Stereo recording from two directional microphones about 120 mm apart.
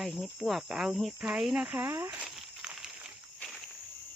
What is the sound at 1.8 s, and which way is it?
Speech, 25° right (ahead or behind).